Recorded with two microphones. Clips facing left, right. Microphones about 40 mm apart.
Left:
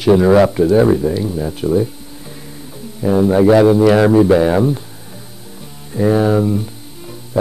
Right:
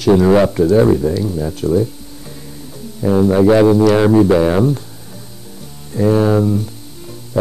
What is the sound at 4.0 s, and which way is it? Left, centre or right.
Speech, centre.